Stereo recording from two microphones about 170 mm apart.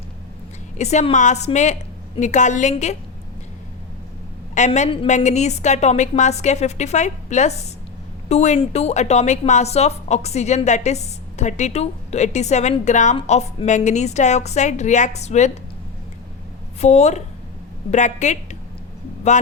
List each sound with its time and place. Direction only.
0.8 s a woman's voice: 40° left (ahead or behind)
4.5 s a woman's voice: 45° left (ahead or behind)
16.8 s a woman's voice: 40° left (ahead or behind)